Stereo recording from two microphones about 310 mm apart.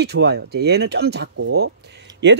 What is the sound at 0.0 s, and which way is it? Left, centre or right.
Speech, right.